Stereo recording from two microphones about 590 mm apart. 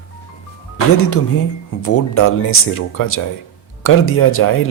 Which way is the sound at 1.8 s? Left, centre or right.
Left.